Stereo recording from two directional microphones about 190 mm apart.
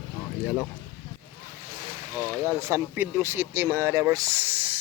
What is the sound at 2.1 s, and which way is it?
Speech, 15° right (ahead or behind).